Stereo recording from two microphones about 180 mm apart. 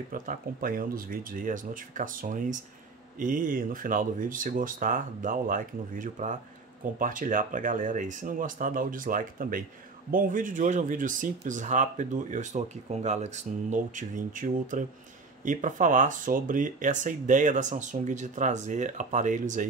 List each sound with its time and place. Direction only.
0.1 s speech: 50° right (ahead or behind)